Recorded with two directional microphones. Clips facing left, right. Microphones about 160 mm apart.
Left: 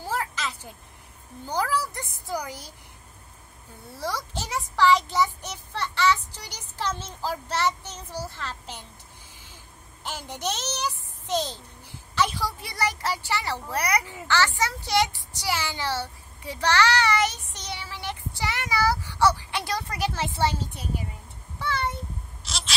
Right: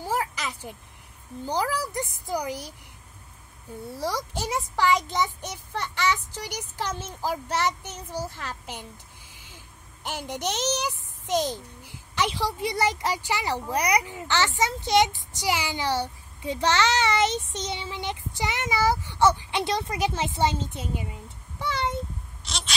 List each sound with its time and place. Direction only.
0.0 s a sound: 15° right (ahead or behind)
1.8 s child singing: 15° right (ahead or behind)
4.3 s child singing: 10° right (ahead or behind)
9.3 s vehicle: 15° right (ahead or behind)
10.0 s a child's voice: 15° right (ahead or behind)
22.4 s a sound: centre (ahead or behind)